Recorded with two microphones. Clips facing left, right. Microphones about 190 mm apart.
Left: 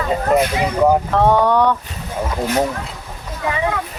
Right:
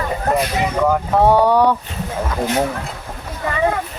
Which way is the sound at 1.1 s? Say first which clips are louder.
Right 1 dB; 10° right (ahead or behind).